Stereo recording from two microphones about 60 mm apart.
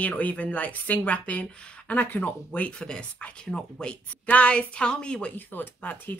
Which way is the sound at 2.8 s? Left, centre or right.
Centre.